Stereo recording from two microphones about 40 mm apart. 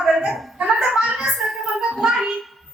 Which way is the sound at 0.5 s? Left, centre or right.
Right.